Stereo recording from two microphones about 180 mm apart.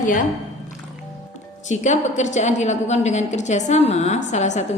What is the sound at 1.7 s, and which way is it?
A woman's voice, 40° left (ahead or behind).